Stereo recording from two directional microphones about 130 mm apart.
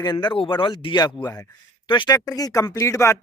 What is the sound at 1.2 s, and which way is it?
Speech, 25° left (ahead or behind).